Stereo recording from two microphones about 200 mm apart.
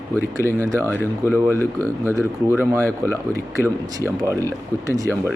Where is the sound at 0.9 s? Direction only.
10° left (ahead or behind).